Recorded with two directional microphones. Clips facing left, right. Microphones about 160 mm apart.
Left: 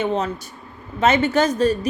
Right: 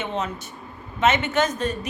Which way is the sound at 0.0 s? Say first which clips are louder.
Left 6 dB; 35° left (ahead or behind).